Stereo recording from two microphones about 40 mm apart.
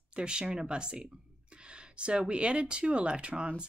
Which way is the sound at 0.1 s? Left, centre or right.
Right.